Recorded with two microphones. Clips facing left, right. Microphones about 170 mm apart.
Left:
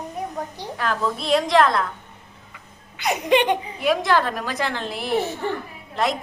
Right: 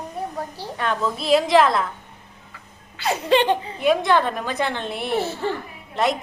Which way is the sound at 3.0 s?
15° left (ahead or behind).